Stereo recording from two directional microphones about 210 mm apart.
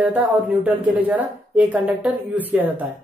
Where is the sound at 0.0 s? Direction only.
10° right (ahead or behind).